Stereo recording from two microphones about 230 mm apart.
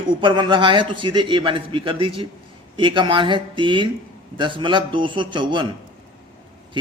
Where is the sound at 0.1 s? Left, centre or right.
Right.